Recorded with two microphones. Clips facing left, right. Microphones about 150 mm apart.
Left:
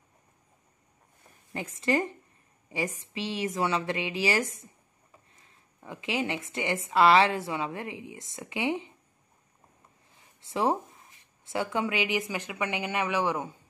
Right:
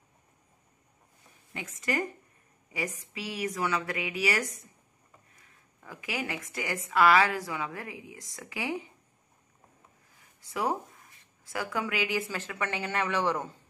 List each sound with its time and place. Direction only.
1.5 s speech: 35° left (ahead or behind)
10.4 s speech: 25° left (ahead or behind)